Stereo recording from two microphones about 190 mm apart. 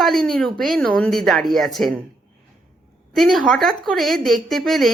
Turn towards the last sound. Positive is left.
turn(degrees=0)  # may be behind; listen again after turning